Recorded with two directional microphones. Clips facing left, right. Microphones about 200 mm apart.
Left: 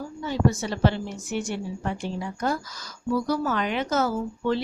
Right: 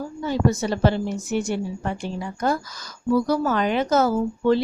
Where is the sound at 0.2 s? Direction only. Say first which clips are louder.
Right 2 dB; 40° right (ahead or behind).